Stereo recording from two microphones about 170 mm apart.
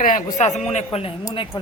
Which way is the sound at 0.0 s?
55° left (ahead or behind).